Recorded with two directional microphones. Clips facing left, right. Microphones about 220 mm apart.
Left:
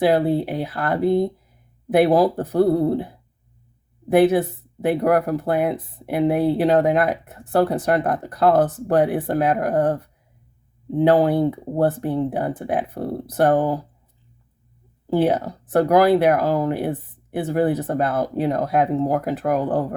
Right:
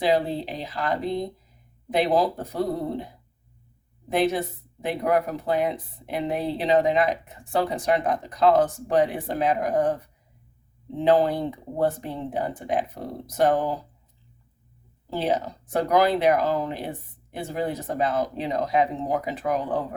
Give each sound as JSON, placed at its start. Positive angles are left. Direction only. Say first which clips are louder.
{"t": 0.0, "sound": "speech", "louder": "left 5 dB", "side_deg": 60}
{"t": 4.9, "sound": "speech", "louder": "left 6 dB", "side_deg": 60}
{"t": 11.0, "sound": "speech", "louder": "left 4 dB", "side_deg": 60}
{"t": 15.2, "sound": "speech", "louder": "left 4 dB", "side_deg": 55}